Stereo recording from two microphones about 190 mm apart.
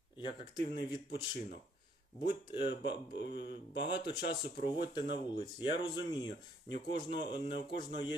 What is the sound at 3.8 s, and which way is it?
Speech, 25° left (ahead or behind).